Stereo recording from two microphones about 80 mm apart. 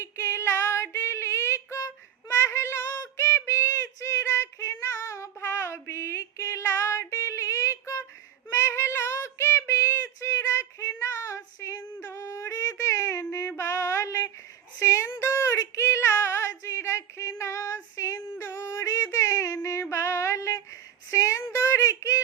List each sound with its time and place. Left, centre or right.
0.0 s female singing: left
2.4 s child singing: left
12.0 s a sound: left
15.1 s female singing: left
17.9 s child singing: left
21.1 s a sound: left